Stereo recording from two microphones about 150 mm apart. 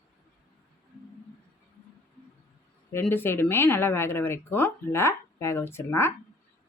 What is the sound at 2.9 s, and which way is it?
Speech, 15° left (ahead or behind).